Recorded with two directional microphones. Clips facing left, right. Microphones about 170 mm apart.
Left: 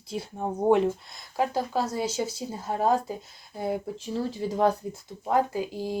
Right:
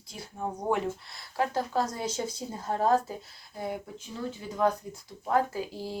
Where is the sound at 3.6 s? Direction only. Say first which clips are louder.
Left 5 dB; 30° left (ahead or behind).